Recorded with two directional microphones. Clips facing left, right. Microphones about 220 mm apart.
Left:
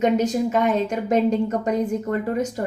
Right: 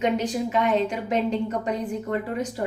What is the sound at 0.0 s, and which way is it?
Speech, 45° left (ahead or behind).